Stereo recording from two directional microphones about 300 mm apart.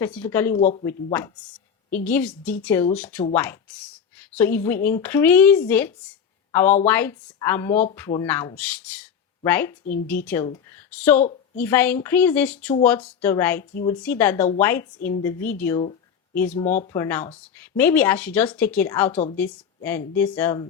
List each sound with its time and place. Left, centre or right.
0.0 s speech: centre
0.6 s speech: left
0.9 s speech: centre